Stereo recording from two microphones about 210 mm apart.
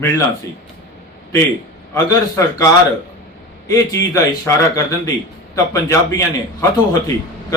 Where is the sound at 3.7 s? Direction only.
15° left (ahead or behind).